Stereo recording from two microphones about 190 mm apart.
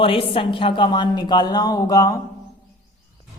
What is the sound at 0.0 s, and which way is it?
Speech, 30° left (ahead or behind).